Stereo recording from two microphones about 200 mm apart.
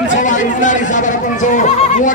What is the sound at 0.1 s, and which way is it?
Speech, 40° left (ahead or behind).